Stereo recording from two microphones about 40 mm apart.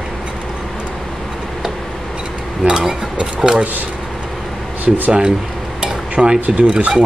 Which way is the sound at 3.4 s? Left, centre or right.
Centre.